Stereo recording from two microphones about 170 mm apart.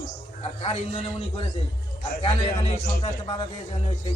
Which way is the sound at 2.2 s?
35° left (ahead or behind).